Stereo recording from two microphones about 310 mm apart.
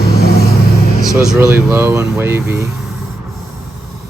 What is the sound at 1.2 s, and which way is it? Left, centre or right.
Speech, centre.